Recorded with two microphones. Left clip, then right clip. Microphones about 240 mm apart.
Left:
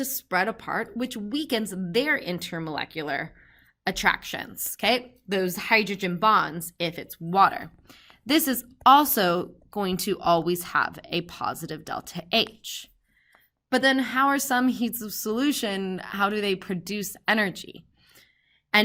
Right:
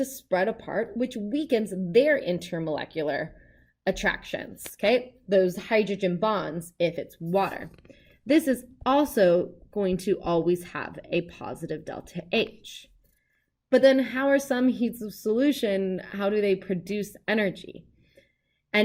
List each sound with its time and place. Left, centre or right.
0.0 s speech: centre
9.2 s speech: centre
13.7 s speech: centre